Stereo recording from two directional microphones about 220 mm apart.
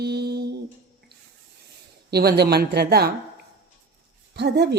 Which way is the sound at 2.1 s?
45° right (ahead or behind).